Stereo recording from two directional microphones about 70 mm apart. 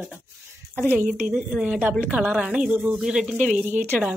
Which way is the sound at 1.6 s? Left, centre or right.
Centre.